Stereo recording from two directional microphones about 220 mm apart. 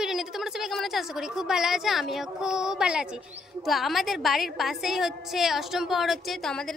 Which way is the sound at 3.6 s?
Centre (ahead or behind).